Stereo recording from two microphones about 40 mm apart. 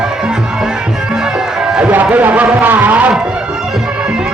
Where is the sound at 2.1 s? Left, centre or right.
Right.